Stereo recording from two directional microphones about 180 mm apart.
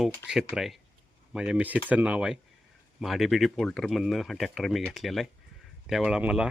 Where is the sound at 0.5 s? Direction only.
Centre (ahead or behind).